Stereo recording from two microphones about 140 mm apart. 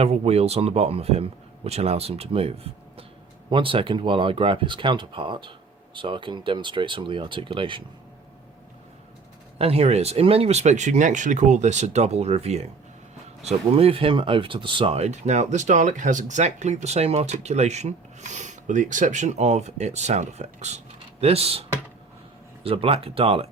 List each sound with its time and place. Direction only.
0.0 s speech: 45° right (ahead or behind)
9.6 s speech: 45° right (ahead or behind)